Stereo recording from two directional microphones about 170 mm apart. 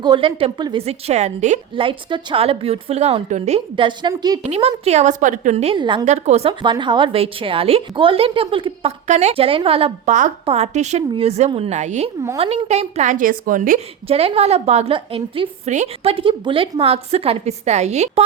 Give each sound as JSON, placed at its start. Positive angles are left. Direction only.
{"t": 0.0, "sound": "a woman's voice", "side_deg": -30}
{"t": 1.7, "sound": "a woman's voice", "side_deg": -30}
{"t": 4.4, "sound": "a woman's voice", "side_deg": -40}
{"t": 6.1, "sound": "a woman's voice", "side_deg": -40}
{"t": 6.5, "sound": "a woman's voice", "side_deg": -25}